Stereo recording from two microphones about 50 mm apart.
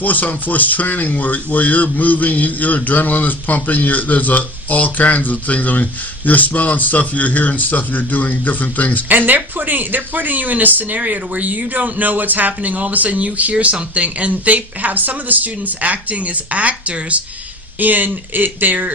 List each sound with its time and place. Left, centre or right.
0.0 s speech: left
9.0 s speech: right